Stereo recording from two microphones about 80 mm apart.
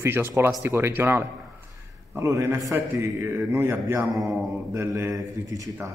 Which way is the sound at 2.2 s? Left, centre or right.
Right.